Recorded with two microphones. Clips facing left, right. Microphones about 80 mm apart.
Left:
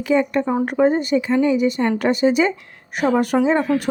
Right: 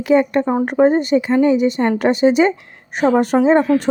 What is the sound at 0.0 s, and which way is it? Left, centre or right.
Speech, right.